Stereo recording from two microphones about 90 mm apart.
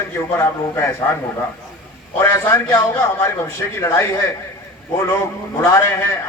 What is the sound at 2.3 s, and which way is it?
A man's voice, 30° left (ahead or behind).